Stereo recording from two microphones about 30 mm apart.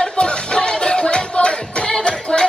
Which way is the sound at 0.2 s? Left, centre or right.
Left.